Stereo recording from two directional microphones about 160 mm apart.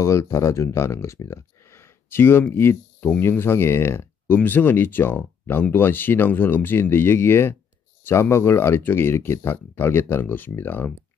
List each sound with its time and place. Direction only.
0.0 s speech: 20° left (ahead or behind)